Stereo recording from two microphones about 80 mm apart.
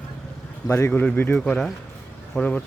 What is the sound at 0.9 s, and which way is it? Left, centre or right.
Speech, centre.